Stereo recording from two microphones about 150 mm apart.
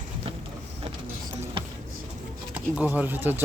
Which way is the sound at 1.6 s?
35° right (ahead or behind).